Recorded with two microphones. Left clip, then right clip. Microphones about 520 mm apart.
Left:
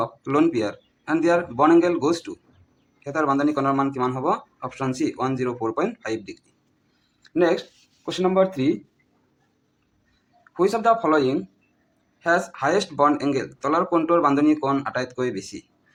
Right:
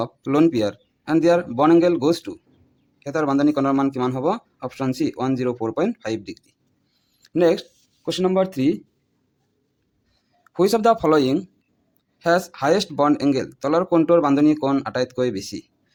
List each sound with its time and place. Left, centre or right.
0.0 s speech: right
7.2 s a sound: right
8.0 s speech: right
10.5 s speech: right